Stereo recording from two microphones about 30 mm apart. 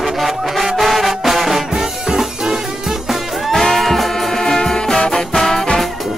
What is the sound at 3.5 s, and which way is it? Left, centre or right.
Music, centre.